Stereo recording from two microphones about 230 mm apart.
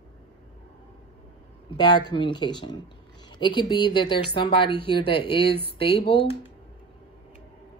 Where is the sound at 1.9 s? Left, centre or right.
Centre.